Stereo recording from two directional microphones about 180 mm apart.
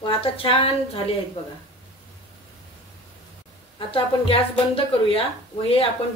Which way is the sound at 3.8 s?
30° left (ahead or behind).